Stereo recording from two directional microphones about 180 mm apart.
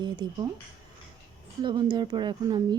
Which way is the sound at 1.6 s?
25° right (ahead or behind).